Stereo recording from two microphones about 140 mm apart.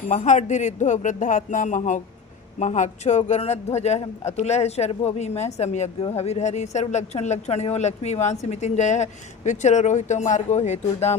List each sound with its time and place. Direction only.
0.1 s a woman's voice: 60° left (ahead or behind)